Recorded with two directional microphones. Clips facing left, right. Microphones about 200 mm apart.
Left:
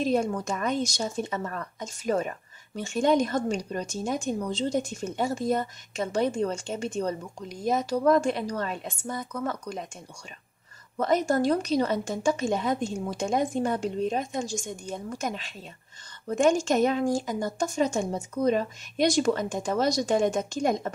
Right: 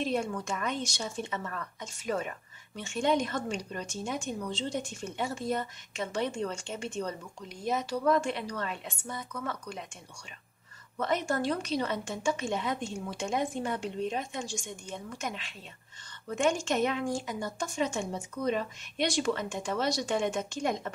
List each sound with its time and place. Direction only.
0.0 s a woman's voice: 40° left (ahead or behind)
11.0 s a woman's voice: 40° left (ahead or behind)